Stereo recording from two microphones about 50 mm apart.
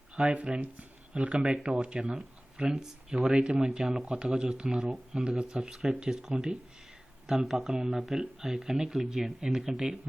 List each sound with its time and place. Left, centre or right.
0.3 s speech: right